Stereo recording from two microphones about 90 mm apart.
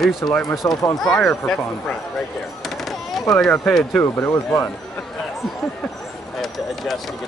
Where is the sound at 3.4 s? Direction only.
10° left (ahead or behind).